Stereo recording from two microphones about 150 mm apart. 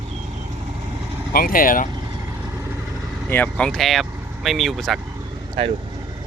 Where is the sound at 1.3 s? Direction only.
75° left (ahead or behind).